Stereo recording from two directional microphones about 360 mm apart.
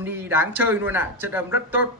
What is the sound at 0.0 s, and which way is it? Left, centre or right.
Mantra, centre.